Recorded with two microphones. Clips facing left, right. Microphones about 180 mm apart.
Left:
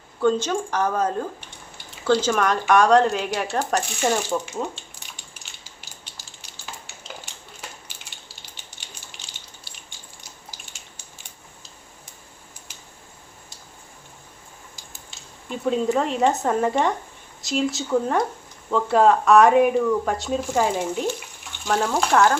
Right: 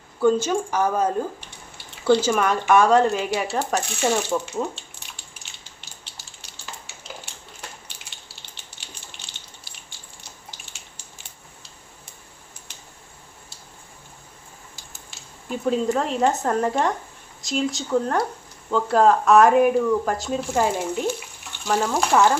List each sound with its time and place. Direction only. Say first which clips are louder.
0.2 s speech: right 2 dB; 10° right (ahead or behind)
9.3 s a sound: left 1 dB; 60° right (ahead or behind)
15.4 s speech: even; centre (ahead or behind)